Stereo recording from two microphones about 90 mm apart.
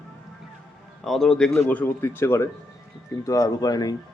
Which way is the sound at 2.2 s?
30° left (ahead or behind).